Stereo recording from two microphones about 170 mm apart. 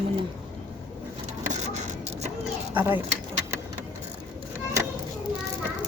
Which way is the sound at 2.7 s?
10° right (ahead or behind).